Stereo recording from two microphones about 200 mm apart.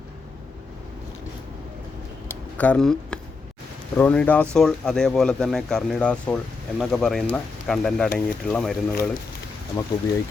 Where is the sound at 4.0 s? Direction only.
5° left (ahead or behind).